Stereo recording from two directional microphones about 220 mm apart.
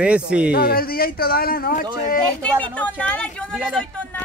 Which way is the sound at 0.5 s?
45° left (ahead or behind).